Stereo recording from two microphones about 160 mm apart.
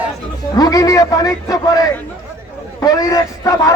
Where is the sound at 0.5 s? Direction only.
25° left (ahead or behind).